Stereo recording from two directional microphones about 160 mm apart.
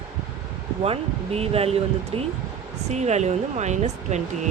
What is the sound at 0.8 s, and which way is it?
Speech, 40° right (ahead or behind).